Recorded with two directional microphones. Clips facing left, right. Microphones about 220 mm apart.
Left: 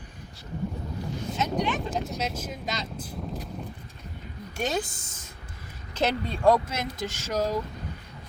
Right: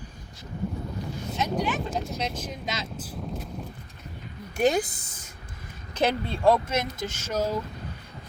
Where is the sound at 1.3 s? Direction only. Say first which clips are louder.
Right 1 dB; 10° right (ahead or behind).